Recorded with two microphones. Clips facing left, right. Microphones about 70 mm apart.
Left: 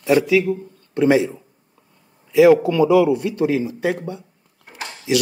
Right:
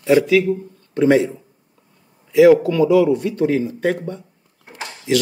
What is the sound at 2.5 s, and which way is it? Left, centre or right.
Speech, centre.